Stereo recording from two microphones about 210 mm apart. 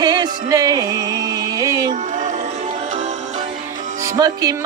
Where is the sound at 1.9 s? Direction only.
35° right (ahead or behind).